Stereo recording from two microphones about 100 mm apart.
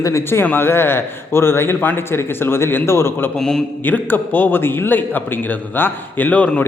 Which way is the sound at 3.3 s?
5° left (ahead or behind).